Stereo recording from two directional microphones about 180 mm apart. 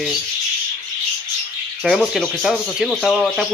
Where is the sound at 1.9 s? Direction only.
Centre (ahead or behind).